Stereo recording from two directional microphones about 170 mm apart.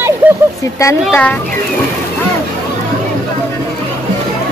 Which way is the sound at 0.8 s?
15° left (ahead or behind).